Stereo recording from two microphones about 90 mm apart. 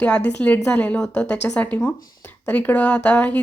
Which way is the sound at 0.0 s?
15° left (ahead or behind).